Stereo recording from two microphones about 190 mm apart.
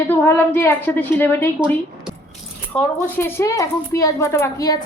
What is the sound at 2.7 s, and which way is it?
A woman's voice, 10° left (ahead or behind).